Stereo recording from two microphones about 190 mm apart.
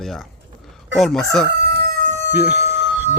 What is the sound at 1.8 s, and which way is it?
Crowing, 50° right (ahead or behind).